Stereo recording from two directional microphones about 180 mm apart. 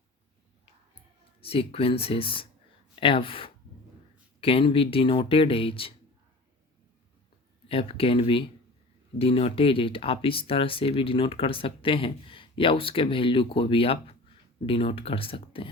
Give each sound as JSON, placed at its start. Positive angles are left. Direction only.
{"t": 1.4, "sound": "speech", "side_deg": 30}
{"t": 7.7, "sound": "speech", "side_deg": 30}